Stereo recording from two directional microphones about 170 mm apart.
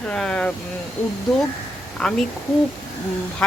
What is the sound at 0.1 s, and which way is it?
Speech, 5° left (ahead or behind).